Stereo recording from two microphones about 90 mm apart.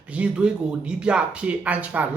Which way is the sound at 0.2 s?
10° right (ahead or behind).